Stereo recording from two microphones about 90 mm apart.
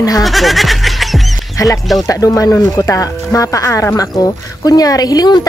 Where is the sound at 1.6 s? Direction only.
40° left (ahead or behind).